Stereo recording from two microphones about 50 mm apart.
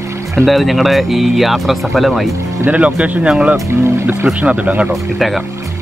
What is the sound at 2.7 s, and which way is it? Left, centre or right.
Speech, right.